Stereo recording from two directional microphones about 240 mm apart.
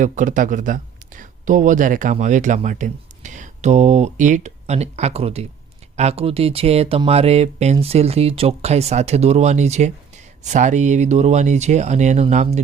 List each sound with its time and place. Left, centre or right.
0.0 s speech: right